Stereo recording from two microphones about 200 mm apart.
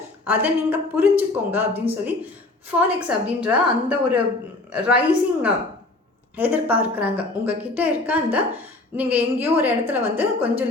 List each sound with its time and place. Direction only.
0.3 s a woman's voice: 10° right (ahead or behind)